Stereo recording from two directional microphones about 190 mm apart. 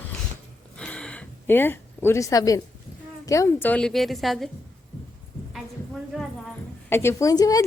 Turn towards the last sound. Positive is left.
turn(degrees=20)  # may be behind; listen again after turning